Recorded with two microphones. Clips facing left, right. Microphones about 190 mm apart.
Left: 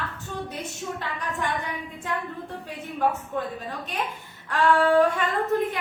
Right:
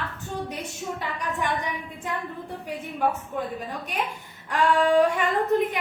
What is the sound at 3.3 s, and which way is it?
Child singing, 15° right (ahead or behind).